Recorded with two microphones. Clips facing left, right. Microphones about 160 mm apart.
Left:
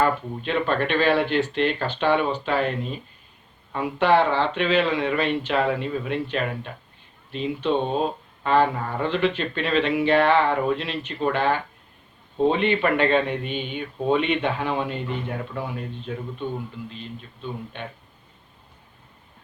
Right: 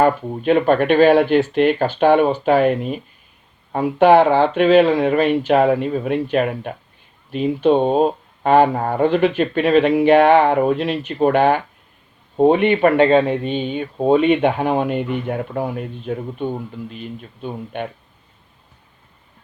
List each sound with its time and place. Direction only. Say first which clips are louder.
0.0 s speech: right 6 dB; 50° right (ahead or behind)
13.0 s speech: right 7 dB; 30° right (ahead or behind); by 16.5 s 45° right (ahead or behind)